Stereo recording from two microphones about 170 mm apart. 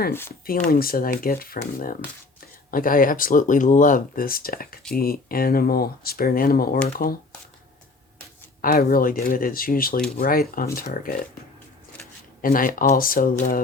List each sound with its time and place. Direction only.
0.1 s speech: 15° left (ahead or behind)
0.7 s speech: 60° left (ahead or behind)
8.6 s speech: 55° left (ahead or behind)
12.4 s speech: 55° left (ahead or behind)